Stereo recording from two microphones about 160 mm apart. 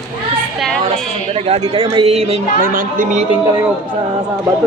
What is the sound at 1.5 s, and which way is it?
Speech, 40° right (ahead or behind).